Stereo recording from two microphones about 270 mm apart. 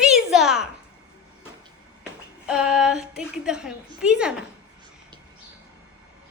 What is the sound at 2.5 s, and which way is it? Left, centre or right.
A woman's voice, centre.